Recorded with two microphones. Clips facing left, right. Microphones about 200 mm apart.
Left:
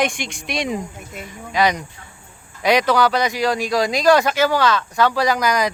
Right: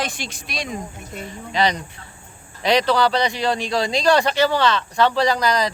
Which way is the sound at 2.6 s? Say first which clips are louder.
Left 1 dB; 10° left (ahead or behind).